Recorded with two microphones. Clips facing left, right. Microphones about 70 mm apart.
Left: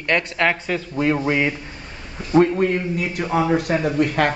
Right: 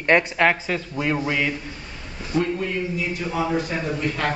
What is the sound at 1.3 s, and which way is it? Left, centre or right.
Speech, centre.